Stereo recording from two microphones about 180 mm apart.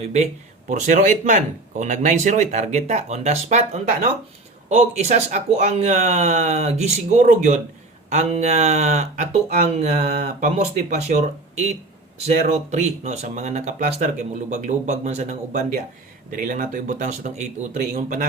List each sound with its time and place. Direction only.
0.7 s speech: 45° right (ahead or behind)
16.3 s speech: 50° right (ahead or behind)